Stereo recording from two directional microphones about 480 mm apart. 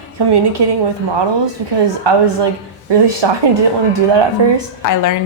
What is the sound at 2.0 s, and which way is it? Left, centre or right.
Speech, right.